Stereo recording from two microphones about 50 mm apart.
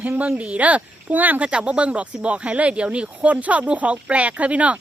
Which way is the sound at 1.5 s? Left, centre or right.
Right.